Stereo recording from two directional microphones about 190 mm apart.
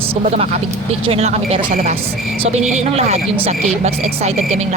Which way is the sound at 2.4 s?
35° right (ahead or behind).